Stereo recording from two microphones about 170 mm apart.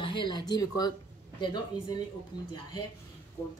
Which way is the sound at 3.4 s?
15° left (ahead or behind).